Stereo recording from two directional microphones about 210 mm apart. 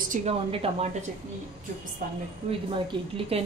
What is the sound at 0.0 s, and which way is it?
Speech, 35° right (ahead or behind).